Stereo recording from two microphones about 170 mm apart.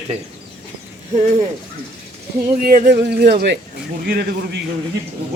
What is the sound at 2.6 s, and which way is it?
Speech, 55° right (ahead or behind).